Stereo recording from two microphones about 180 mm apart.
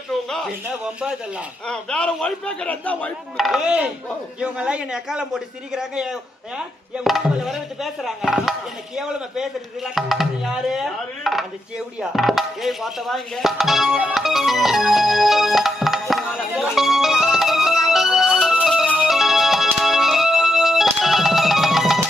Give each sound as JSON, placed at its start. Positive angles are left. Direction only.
{"t": 0.3, "sound": "speech", "side_deg": 0}
{"t": 11.9, "sound": "music", "side_deg": 0}